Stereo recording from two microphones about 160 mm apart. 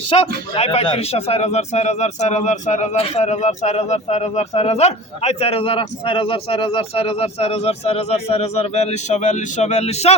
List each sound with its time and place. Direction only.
0.1 s speech: 35° left (ahead or behind)